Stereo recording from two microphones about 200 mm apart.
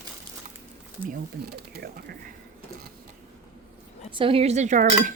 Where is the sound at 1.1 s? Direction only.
50° right (ahead or behind).